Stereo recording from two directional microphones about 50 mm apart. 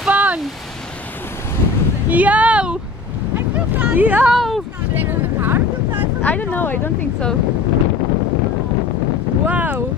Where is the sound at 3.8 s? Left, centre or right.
Right.